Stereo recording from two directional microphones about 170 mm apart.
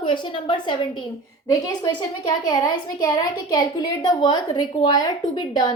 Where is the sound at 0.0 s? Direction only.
30° left (ahead or behind).